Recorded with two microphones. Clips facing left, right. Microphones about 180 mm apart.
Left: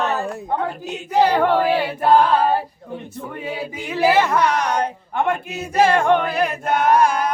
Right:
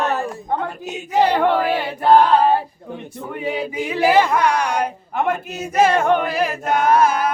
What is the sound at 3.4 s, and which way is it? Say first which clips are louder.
A woman's voice: right 6 dB; 15° right (ahead or behind).